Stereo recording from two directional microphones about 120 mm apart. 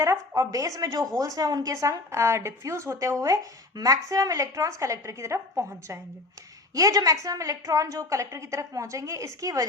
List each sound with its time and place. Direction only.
0.0 s a woman's voice: 25° right (ahead or behind)